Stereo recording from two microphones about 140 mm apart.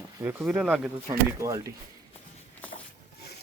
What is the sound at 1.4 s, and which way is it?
Speech, 25° right (ahead or behind).